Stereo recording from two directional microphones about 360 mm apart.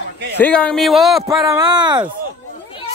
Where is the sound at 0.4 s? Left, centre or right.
Centre.